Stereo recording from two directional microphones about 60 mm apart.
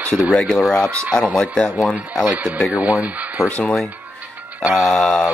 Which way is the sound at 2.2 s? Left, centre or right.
Right.